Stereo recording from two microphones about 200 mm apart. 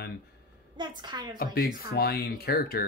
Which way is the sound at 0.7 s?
20° right (ahead or behind).